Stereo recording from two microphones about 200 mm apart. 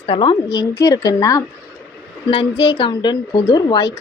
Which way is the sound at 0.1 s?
25° left (ahead or behind).